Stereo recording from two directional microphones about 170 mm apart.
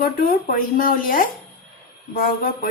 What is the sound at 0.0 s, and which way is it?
A woman's voice, 55° left (ahead or behind).